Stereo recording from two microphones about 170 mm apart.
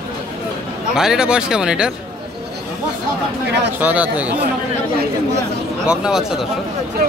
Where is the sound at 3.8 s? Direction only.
10° right (ahead or behind).